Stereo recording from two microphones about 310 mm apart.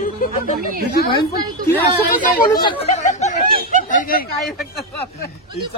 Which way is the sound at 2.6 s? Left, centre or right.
Centre.